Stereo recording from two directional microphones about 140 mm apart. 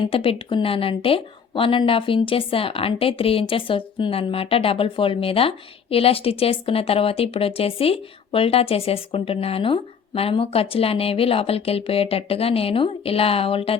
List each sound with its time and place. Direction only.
0.0 s a woman's voice: 40° left (ahead or behind)